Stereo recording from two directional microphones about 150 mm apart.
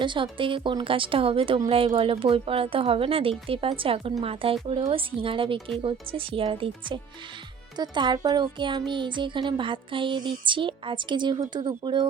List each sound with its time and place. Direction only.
0.0 s speech: 35° right (ahead or behind)